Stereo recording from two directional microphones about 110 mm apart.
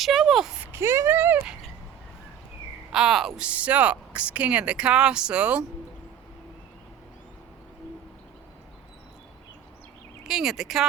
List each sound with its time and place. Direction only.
0.0 s a sound: centre (ahead or behind)
0.6 s speech: 20° right (ahead or behind)
2.9 s speech: 5° right (ahead or behind)
10.2 s speech: 5° right (ahead or behind)